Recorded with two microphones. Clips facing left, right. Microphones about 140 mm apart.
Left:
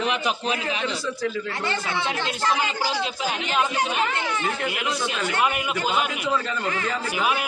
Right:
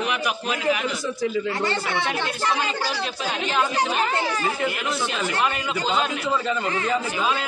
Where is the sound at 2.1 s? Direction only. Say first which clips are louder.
Even; 20° left (ahead or behind).